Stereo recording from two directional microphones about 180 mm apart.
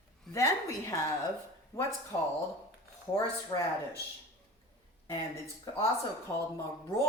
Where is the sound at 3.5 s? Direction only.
25° left (ahead or behind).